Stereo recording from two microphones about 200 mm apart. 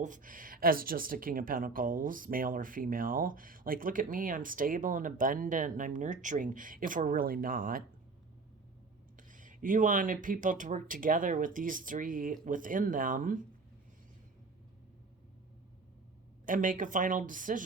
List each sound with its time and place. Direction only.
0.0 s speech: 40° right (ahead or behind)
9.3 s speech: 40° right (ahead or behind)
16.5 s speech: 40° right (ahead or behind)